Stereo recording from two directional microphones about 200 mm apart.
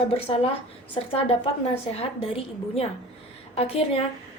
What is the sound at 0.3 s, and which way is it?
A woman's voice, 25° left (ahead or behind).